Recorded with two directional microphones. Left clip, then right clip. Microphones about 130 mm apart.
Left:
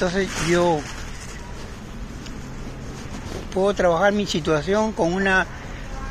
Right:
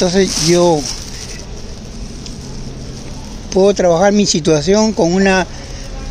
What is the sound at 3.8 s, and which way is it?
Speech, 90° right.